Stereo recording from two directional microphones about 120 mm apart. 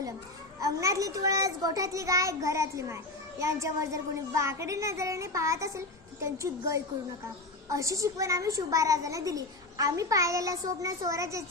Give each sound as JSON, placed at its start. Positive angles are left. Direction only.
{"t": 0.6, "sound": "a child's voice", "side_deg": -25}